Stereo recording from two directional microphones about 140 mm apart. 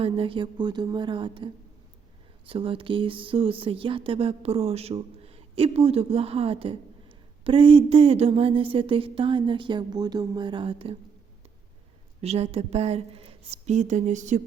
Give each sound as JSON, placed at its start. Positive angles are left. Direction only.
{"t": 0.0, "sound": "speech", "side_deg": -40}
{"t": 2.5, "sound": "speech", "side_deg": -40}
{"t": 12.2, "sound": "a woman's voice", "side_deg": -45}